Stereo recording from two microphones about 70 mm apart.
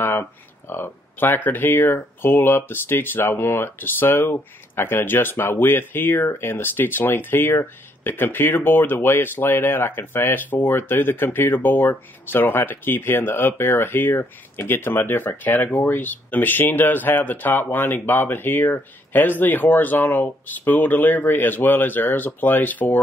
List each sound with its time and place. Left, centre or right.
0.0 s speech: left